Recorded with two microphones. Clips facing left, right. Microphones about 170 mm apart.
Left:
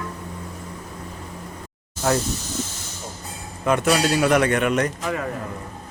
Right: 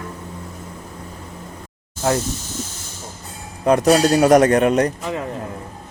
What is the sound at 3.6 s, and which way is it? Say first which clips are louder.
Speech: right 5 dB; 35° right (ahead or behind).